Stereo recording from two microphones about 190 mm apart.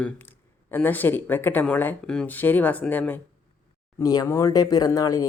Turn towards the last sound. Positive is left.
turn(degrees=15)  # may be behind; listen again after turning